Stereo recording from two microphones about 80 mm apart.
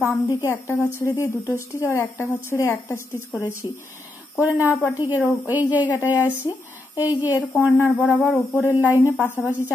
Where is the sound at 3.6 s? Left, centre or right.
Left.